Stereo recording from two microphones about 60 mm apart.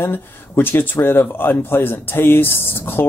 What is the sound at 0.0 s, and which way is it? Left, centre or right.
Speech, left.